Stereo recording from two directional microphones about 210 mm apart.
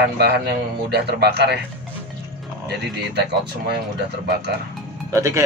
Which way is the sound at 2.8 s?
50° right (ahead or behind).